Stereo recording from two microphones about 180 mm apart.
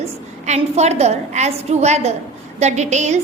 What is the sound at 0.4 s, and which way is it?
A woman's voice, 35° right (ahead or behind).